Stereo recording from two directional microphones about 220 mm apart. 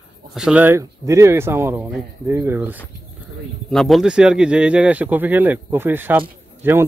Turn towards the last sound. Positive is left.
turn(degrees=-10)  # may be behind; listen again after turning